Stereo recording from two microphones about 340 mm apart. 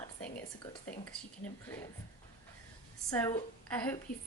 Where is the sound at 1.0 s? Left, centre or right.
Centre.